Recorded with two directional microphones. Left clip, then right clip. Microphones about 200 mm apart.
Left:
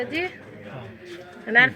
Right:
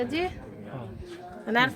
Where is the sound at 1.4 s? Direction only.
10° right (ahead or behind).